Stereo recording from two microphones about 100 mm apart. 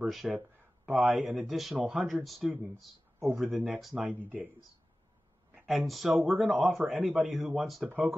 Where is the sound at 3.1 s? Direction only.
20° right (ahead or behind).